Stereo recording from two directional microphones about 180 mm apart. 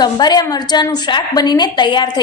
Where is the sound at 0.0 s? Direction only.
25° left (ahead or behind).